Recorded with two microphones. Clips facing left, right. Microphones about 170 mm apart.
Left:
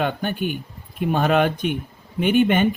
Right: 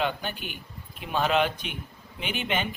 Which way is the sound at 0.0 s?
50° left (ahead or behind).